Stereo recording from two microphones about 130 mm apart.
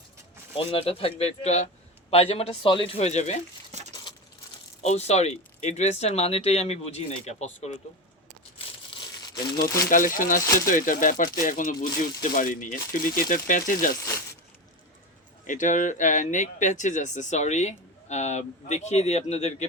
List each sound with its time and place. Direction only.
0.5 s a man's voice: 45° left (ahead or behind)
3.7 s a sound: 60° right (ahead or behind)
4.8 s speech: 55° left (ahead or behind)
8.5 s crumpling: 40° left (ahead or behind)
9.9 s speech: 90° left
10.4 s speech: 25° left (ahead or behind)
10.7 s speech: 90° left
13.9 s speech: 25° left (ahead or behind)
15.4 s speech: 75° left (ahead or behind); by 19.6 s 60° left (ahead or behind)